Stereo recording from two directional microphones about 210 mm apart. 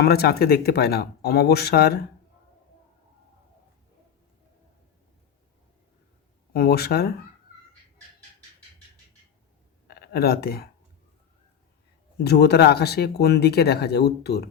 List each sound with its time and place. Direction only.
0.0 s speech: 50° left (ahead or behind)
6.5 s speech: 50° left (ahead or behind)
9.8 s speech: 50° left (ahead or behind)
12.2 s speech: 50° left (ahead or behind)